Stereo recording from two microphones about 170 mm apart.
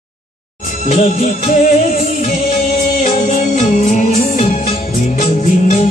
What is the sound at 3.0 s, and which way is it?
Music, 45° left (ahead or behind).